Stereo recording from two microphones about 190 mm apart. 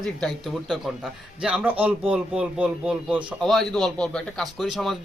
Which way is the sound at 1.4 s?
5° right (ahead or behind).